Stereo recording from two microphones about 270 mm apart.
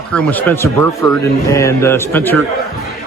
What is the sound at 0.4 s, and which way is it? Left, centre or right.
Speech, centre.